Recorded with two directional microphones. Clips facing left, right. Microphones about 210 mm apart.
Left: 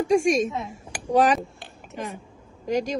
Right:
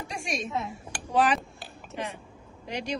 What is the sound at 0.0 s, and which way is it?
A woman's voice, 45° left (ahead or behind).